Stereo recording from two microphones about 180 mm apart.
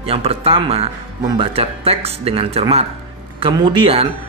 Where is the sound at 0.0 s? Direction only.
35° right (ahead or behind).